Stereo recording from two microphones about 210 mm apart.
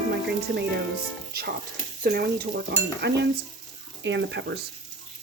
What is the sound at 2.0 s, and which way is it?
Speech, 45° right (ahead or behind).